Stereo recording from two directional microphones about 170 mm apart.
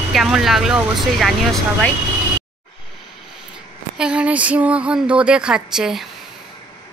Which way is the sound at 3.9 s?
5° right (ahead or behind).